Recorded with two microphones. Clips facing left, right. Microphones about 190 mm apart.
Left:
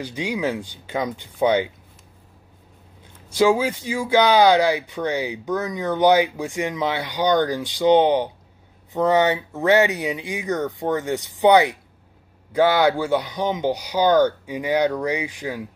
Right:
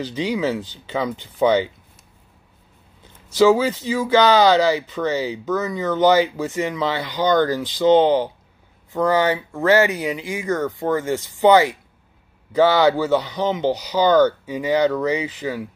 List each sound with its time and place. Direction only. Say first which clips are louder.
0.0 s speech: right 3 dB; 10° left (ahead or behind)
3.3 s speech: right 3 dB; 10° left (ahead or behind)